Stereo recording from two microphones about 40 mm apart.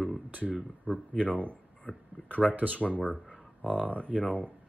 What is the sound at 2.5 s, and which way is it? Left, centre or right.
Speech, right.